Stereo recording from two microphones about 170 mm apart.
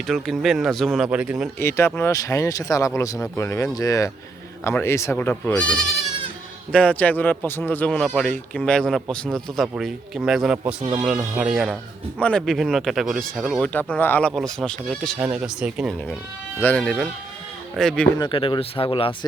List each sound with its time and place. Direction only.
0.1 s speech: centre (ahead or behind)
1.5 s speech: 15° left (ahead or behind); by 16.0 s 5° right (ahead or behind)
16.6 s speech: 10° left (ahead or behind)
18.2 s speech: 30° left (ahead or behind)